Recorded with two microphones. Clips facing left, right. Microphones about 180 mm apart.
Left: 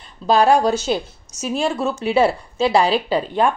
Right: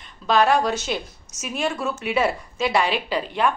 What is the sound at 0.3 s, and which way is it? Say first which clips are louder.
A woman's voice: left 4 dB; 35° left (ahead or behind).